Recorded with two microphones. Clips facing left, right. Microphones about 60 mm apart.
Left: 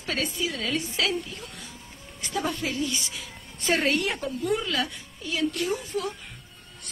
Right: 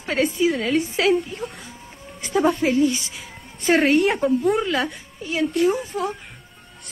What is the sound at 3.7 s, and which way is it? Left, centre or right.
A woman's voice, right.